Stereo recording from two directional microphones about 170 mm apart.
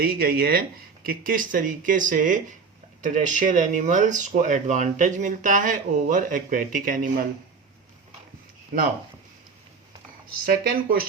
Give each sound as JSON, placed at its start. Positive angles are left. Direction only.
{"t": 0.0, "sound": "speech", "side_deg": -60}
{"t": 8.7, "sound": "speech", "side_deg": -60}
{"t": 10.4, "sound": "speech", "side_deg": -60}